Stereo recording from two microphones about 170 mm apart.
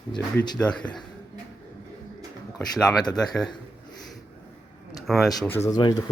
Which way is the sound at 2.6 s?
5° left (ahead or behind).